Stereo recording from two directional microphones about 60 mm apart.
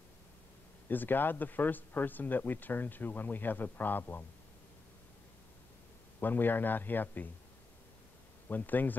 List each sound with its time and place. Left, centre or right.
0.8 s speech: left
6.1 s speech: left
8.5 s speech: left